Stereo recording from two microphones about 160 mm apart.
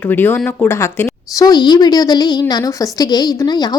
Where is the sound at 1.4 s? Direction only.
25° left (ahead or behind).